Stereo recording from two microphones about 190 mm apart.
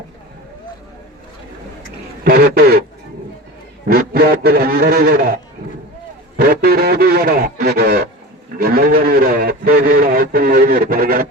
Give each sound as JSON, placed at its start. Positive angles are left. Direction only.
{"t": 2.2, "sound": "speech", "side_deg": -50}
{"t": 3.8, "sound": "a man's voice", "side_deg": -50}